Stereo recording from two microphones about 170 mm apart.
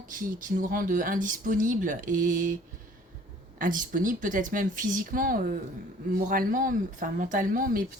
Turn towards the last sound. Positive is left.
turn(degrees=-55)  # may be behind; listen again after turning